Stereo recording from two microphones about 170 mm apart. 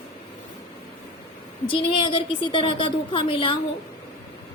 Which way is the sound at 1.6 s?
30° left (ahead or behind).